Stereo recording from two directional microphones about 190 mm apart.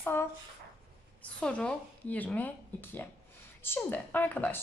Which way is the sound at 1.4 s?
5° left (ahead or behind).